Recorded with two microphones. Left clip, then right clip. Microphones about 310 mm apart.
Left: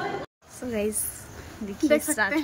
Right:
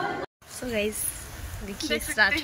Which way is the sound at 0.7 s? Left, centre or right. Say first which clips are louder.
Even; centre.